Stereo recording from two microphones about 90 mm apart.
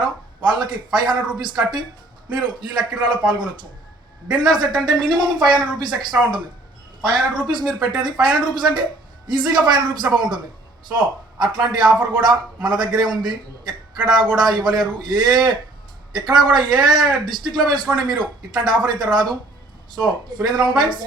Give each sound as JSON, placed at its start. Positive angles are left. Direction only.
{"t": 1.0, "sound": "speech", "side_deg": -55}